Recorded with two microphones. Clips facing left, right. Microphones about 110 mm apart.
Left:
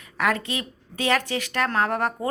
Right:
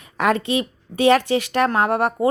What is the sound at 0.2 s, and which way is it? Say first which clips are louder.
A woman's voice: right 6 dB; 20° right (ahead or behind).